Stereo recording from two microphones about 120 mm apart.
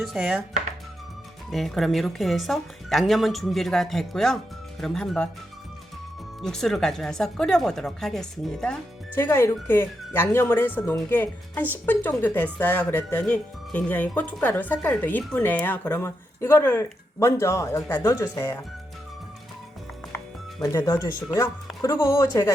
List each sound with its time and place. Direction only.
0.0 s chopping: 5° right (ahead or behind)
1.5 s a woman's voice: centre (ahead or behind)
6.4 s a woman's voice: 5° left (ahead or behind)
9.1 s speech: 20° left (ahead or behind)
20.6 s speech: 25° left (ahead or behind)